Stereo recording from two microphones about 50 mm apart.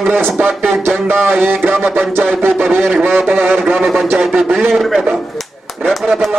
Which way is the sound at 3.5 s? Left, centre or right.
Centre.